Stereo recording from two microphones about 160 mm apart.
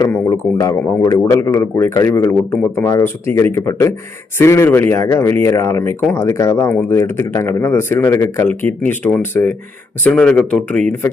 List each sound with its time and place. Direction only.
0.1 s speech: 20° left (ahead or behind)